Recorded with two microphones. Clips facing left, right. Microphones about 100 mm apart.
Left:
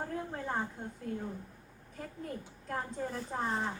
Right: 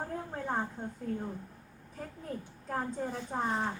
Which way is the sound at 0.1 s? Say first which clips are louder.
Right 1 dB; centre (ahead or behind).